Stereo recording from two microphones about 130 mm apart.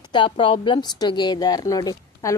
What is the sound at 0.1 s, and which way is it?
A woman's voice, 40° left (ahead or behind).